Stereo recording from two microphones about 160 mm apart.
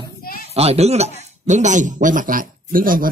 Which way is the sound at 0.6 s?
40° right (ahead or behind).